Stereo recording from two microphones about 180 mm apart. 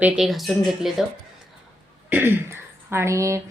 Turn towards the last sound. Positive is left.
turn(degrees=-15)  # may be behind; listen again after turning